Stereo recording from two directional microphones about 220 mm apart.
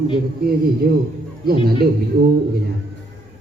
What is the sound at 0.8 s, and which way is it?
Speech, 45° right (ahead or behind).